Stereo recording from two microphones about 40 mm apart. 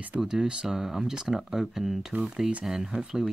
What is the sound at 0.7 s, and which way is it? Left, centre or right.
Speech, centre.